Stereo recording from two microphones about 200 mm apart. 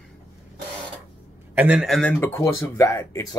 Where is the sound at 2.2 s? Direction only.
15° left (ahead or behind).